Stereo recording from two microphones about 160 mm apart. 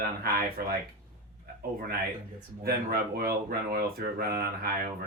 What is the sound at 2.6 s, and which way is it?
Speech, 75° right (ahead or behind).